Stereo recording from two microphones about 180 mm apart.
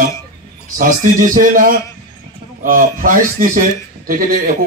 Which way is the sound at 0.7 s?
50° right (ahead or behind).